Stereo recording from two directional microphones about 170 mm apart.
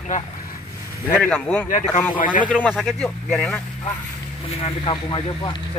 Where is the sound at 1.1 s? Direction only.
10° left (ahead or behind).